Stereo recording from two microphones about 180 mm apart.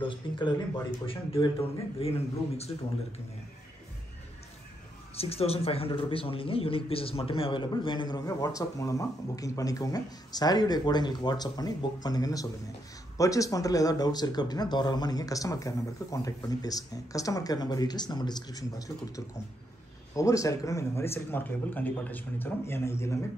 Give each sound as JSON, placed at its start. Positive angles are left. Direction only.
{"t": 0.0, "sound": "a man's voice", "side_deg": 25}
{"t": 5.1, "sound": "speech", "side_deg": 35}